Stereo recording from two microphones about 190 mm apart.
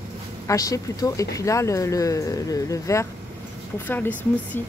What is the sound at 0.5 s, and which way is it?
Speech, 20° left (ahead or behind).